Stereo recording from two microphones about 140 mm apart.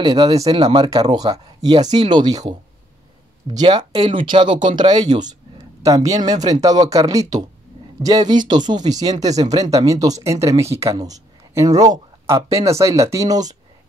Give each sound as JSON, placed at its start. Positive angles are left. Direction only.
{"t": 0.1, "sound": "speech", "side_deg": -40}